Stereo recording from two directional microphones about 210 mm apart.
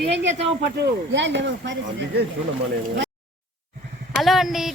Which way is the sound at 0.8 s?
55° right (ahead or behind).